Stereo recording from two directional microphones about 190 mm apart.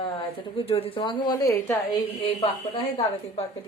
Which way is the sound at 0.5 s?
30° left (ahead or behind).